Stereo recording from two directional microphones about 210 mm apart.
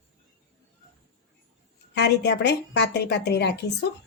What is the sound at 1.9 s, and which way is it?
A woman's voice, 50° left (ahead or behind).